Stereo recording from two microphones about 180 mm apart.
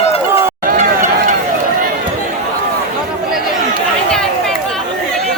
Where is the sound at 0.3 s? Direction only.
15° right (ahead or behind).